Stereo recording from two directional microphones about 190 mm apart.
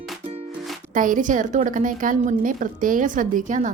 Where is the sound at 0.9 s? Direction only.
45° right (ahead or behind).